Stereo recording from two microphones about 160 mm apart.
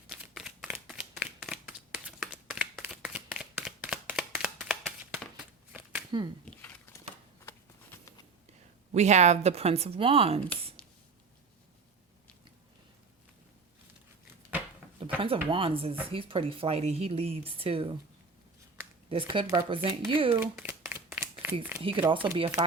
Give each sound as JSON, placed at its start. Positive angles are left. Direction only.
{"t": 0.1, "sound": "shuffling cards", "side_deg": -5}
{"t": 6.1, "sound": "speech", "side_deg": -30}
{"t": 6.4, "sound": "a sound", "side_deg": 10}
{"t": 8.9, "sound": "speech", "side_deg": -45}
{"t": 15.2, "sound": "speech", "side_deg": -35}
{"t": 19.0, "sound": "speech", "side_deg": -35}
{"t": 20.3, "sound": "crumpling", "side_deg": -15}
{"t": 21.8, "sound": "speech", "side_deg": -35}